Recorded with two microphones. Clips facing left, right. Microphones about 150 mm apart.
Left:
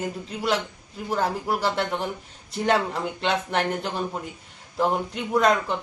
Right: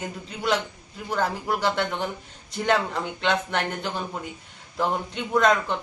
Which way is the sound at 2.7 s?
Centre (ahead or behind).